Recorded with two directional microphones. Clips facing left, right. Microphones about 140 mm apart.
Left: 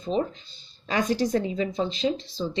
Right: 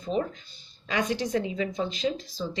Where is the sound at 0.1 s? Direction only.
25° left (ahead or behind).